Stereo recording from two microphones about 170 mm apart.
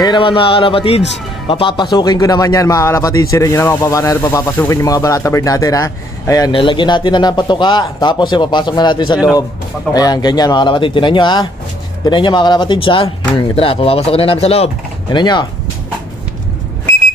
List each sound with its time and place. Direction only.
0.0 s speech: 30° left (ahead or behind)
6.5 s speech: 30° left (ahead or behind)